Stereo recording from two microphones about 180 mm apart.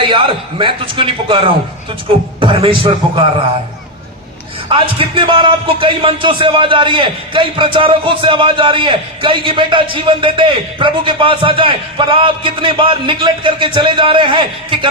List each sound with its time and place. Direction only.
0.0 s speech: 30° right (ahead or behind)
4.7 s speech: 30° right (ahead or behind)